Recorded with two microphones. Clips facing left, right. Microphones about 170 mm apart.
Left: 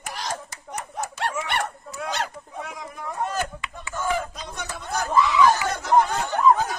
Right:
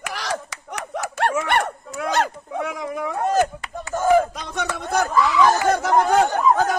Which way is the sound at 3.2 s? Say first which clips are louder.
Right 9 dB; 45° right (ahead or behind).